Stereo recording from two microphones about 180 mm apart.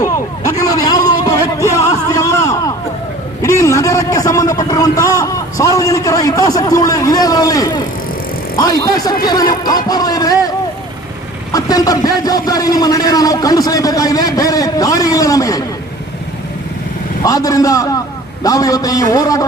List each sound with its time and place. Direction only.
0.0 s a sound: 20° left (ahead or behind)
8.5 s a man's voice: 20° left (ahead or behind)
11.5 s a man's voice: 20° left (ahead or behind)
17.2 s a man's voice: 20° left (ahead or behind)